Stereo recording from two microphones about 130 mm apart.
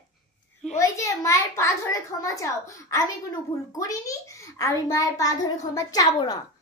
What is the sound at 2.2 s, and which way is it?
A child's voice, 25° left (ahead or behind).